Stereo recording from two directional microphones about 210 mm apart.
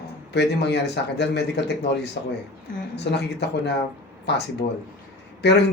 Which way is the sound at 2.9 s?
55° left (ahead or behind).